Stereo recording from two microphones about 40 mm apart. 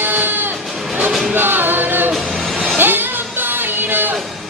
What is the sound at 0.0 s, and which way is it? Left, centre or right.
Music, right.